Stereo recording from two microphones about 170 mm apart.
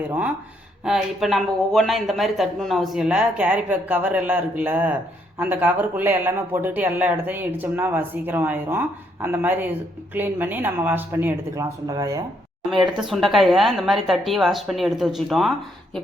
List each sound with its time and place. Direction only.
0.9 s speech: centre (ahead or behind); by 13.0 s 25° right (ahead or behind)
13.0 s speech: 5° right (ahead or behind)